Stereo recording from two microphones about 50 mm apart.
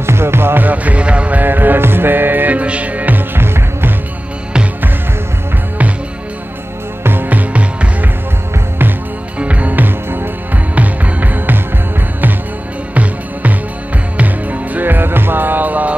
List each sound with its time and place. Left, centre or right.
0.0 s music: right
0.7 s music: right
1.4 s music: right
3.3 s music: right
7.0 s music: right
9.4 s music: right
12.9 s music: right